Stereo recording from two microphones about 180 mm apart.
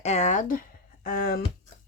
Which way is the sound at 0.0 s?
40° left (ahead or behind).